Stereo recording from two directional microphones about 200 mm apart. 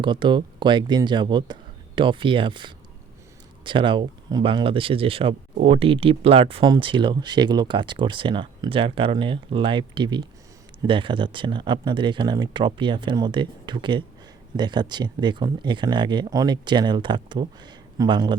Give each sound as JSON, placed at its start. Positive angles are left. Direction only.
{"t": 0.0, "sound": "speech", "side_deg": -25}